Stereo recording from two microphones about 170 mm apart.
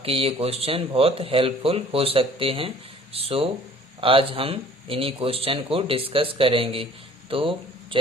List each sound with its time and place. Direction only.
0.0 s speech: 35° right (ahead or behind)